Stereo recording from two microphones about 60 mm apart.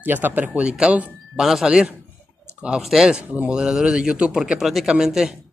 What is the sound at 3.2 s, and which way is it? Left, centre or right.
Speech, right.